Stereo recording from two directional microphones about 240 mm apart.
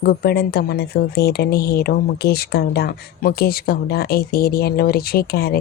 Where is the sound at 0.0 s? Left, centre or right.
Left.